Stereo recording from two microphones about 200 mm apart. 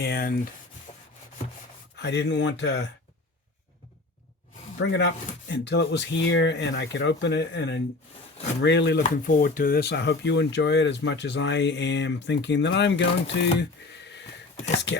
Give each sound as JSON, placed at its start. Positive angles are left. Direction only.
{"t": 0.0, "sound": "speech", "side_deg": 50}
{"t": 0.9, "sound": "rub", "side_deg": 30}
{"t": 2.0, "sound": "speech", "side_deg": 60}
{"t": 4.8, "sound": "speech", "side_deg": 65}
{"t": 9.0, "sound": "speech", "side_deg": 45}